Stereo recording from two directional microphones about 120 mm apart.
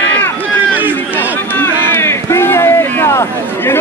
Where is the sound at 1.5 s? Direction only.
15° left (ahead or behind).